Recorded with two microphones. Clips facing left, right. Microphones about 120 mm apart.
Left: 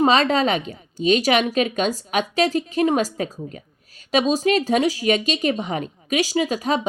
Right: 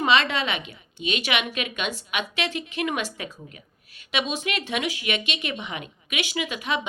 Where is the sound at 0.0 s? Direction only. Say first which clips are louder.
Left 5 dB; 40° left (ahead or behind).